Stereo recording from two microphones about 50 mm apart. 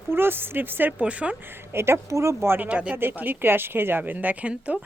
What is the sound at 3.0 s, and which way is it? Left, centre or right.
Speech, right.